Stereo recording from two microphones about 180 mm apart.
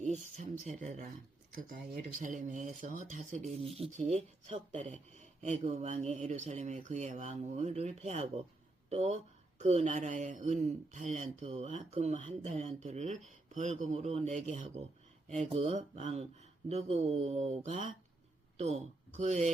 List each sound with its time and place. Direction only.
0.0 s speech: 40° right (ahead or behind)